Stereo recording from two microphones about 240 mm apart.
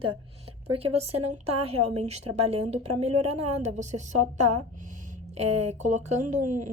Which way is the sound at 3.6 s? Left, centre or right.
Right.